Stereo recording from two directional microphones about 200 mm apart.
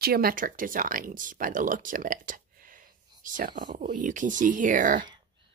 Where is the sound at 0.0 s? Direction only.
50° right (ahead or behind).